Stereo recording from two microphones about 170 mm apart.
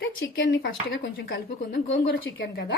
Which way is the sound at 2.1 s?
90° left.